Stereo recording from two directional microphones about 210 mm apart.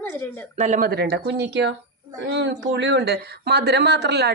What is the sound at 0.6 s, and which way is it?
Speech, 35° right (ahead or behind).